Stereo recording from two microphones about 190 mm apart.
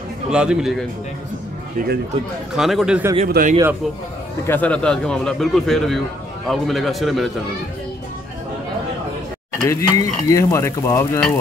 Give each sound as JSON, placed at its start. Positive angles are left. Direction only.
{"t": 0.3, "sound": "a man's voice", "side_deg": -5}
{"t": 1.8, "sound": "speech", "side_deg": -40}
{"t": 2.5, "sound": "a man's voice", "side_deg": 0}
{"t": 3.3, "sound": "speech", "side_deg": -50}
{"t": 4.5, "sound": "a man's voice", "side_deg": 10}
{"t": 9.6, "sound": "speech", "side_deg": 15}